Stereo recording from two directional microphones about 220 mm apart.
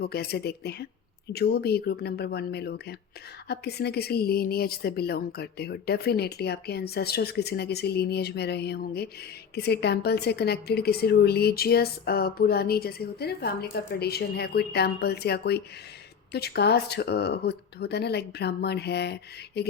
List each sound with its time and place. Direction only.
0.0 s a woman's voice: 45° left (ahead or behind)